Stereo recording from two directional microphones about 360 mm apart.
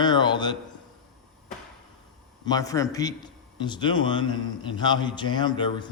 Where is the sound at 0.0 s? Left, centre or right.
Centre.